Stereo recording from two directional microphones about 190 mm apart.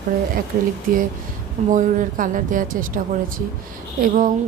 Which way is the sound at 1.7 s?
45° right (ahead or behind).